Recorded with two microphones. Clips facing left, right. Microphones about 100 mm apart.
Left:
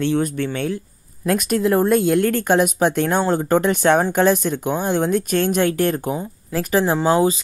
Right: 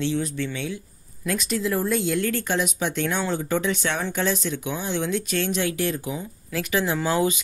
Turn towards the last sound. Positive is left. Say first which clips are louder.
# left 6 dB
turn(degrees=35)  # may be behind; listen again after turning